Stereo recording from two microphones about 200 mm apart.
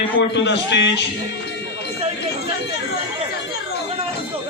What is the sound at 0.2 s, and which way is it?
Speech, 60° left (ahead or behind).